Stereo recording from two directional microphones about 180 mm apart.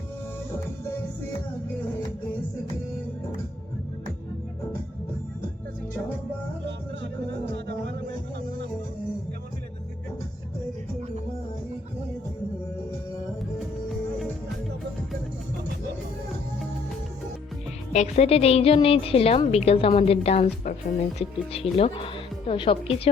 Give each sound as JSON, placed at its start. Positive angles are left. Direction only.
{"t": 6.7, "sound": "music", "side_deg": -75}
{"t": 17.9, "sound": "a woman's voice", "side_deg": 40}